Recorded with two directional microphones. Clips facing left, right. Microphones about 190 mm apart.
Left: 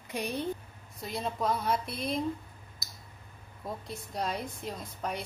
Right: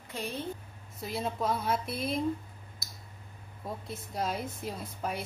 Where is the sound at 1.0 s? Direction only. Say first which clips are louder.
Even; centre (ahead or behind).